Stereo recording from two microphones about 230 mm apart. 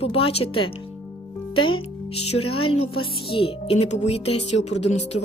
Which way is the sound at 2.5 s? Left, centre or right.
Left.